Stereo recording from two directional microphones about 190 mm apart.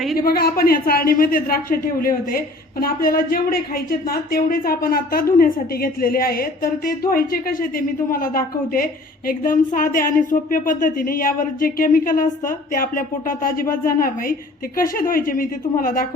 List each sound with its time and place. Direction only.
0.2 s a woman's voice: 55° left (ahead or behind)